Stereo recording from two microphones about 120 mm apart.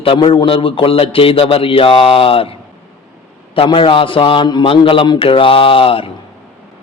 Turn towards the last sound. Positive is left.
turn(degrees=50)  # may be behind; listen again after turning